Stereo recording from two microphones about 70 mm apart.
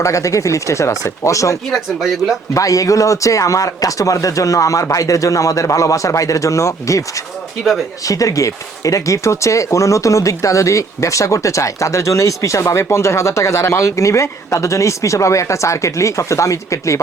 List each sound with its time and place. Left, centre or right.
0.0 s speech: left
1.7 s speech: centre
2.6 s speech: left
7.6 s speech: centre
8.0 s speech: left